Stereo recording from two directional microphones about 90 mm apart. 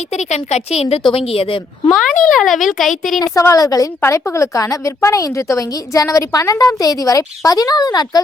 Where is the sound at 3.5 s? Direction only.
40° left (ahead or behind).